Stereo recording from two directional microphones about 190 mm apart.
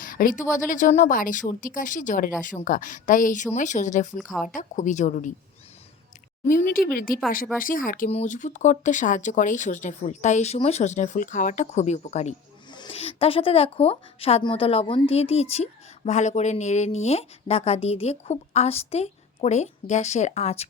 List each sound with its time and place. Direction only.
0.0 s a woman's voice: 45° left (ahead or behind)
4.2 s speech: centre (ahead or behind)
4.5 s a woman's voice: 40° left (ahead or behind)
6.5 s a woman's voice: 45° left (ahead or behind)
12.7 s a woman's voice: 25° left (ahead or behind)